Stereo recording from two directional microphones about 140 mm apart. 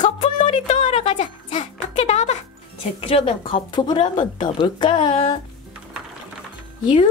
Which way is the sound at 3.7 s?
30° left (ahead or behind).